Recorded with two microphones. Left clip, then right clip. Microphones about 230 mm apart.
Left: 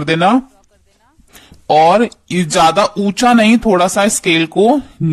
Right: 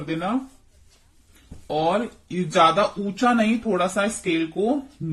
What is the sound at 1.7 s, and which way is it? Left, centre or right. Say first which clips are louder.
Speech: left 14 dB; left.